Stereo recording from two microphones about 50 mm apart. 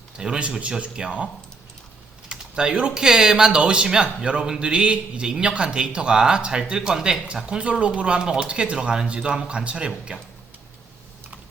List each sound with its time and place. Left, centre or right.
0.2 s a man's voice: centre
2.3 s a man's voice: centre